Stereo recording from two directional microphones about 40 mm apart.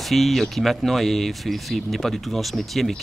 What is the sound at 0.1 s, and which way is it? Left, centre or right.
Speech, centre.